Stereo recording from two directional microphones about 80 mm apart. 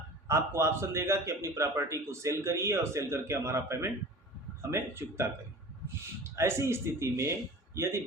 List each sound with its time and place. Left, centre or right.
0.3 s a man's voice: right